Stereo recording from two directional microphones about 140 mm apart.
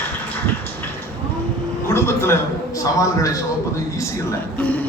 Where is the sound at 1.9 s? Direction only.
20° left (ahead or behind).